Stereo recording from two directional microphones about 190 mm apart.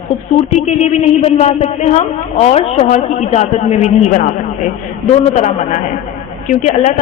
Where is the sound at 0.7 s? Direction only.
35° left (ahead or behind).